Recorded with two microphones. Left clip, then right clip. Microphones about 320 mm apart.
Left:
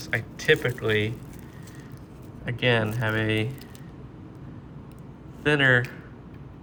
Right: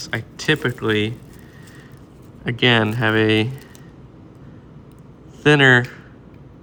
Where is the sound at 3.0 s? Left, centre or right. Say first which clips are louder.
Right 9 dB; centre.